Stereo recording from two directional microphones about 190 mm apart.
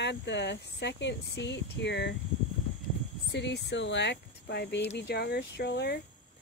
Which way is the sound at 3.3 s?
65° left (ahead or behind).